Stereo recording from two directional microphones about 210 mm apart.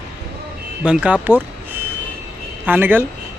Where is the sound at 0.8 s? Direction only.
5° right (ahead or behind).